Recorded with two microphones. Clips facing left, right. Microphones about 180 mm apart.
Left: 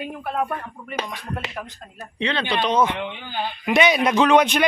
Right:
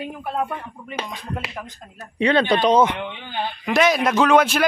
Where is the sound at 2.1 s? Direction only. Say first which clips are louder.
Right 6 dB; 45° right (ahead or behind).